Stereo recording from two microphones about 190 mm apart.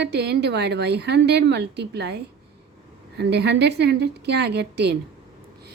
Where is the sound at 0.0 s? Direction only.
60° right (ahead or behind).